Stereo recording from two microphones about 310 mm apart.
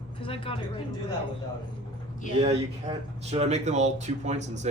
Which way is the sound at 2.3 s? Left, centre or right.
Centre.